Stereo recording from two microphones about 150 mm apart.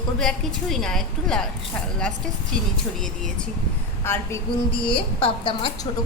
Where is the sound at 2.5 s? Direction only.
5° left (ahead or behind).